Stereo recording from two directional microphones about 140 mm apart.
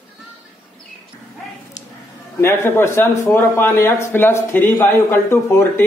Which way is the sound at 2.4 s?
15° left (ahead or behind).